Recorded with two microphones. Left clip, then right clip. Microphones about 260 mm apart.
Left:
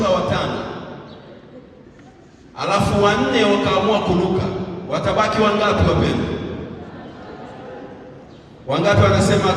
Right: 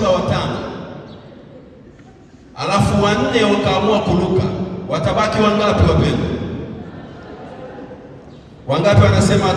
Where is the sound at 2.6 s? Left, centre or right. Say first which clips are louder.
Even; right.